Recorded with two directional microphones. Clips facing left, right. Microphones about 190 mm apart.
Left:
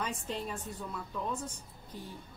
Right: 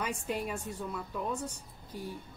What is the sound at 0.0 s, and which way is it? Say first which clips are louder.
Speech: right 2 dB; 10° right (ahead or behind).